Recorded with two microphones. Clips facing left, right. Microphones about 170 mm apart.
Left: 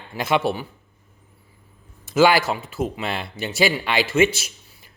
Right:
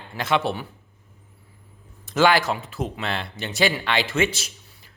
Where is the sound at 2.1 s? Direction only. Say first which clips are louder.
Left 2 dB; 5° left (ahead or behind).